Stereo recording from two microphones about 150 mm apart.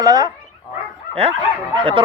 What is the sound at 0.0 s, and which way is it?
Speech, 25° right (ahead or behind).